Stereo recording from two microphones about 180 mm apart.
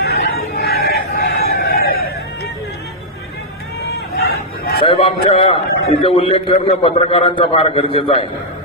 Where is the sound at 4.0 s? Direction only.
65° left (ahead or behind).